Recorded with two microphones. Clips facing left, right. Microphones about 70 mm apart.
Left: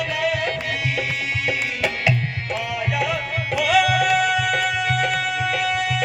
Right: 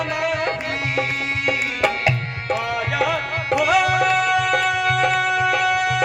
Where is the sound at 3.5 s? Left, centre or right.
Right.